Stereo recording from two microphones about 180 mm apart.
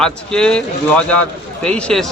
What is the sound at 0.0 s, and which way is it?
Speech, 5° left (ahead or behind).